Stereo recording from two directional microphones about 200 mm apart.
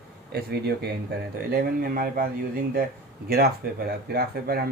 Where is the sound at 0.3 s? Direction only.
55° right (ahead or behind).